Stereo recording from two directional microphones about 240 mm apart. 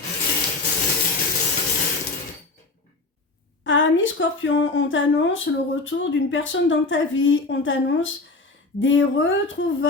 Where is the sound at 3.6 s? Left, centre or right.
Left.